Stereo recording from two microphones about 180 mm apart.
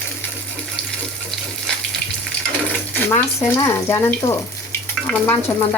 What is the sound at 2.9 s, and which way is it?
Speech, 15° left (ahead or behind).